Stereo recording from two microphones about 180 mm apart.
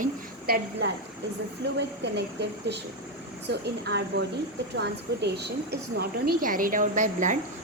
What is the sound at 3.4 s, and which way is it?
A woman's voice, 70° right (ahead or behind).